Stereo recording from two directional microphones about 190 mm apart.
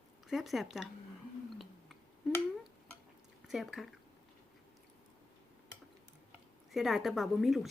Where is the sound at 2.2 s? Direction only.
Centre (ahead or behind).